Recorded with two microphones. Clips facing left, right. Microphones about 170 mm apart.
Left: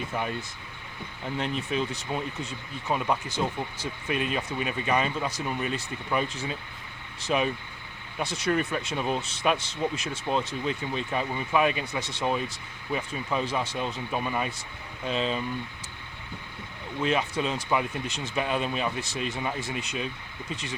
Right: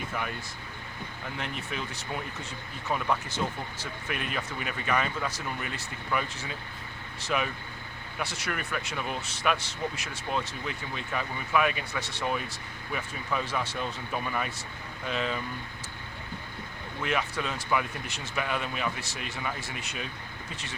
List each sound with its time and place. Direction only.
1.4 s speech: 25° left (ahead or behind)
7.3 s speech: 25° left (ahead or behind)
8.5 s speech: 30° left (ahead or behind)
17.0 s speech: 25° left (ahead or behind)